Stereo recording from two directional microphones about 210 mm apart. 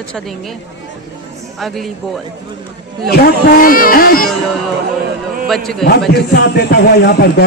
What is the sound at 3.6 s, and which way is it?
Speech, 40° left (ahead or behind).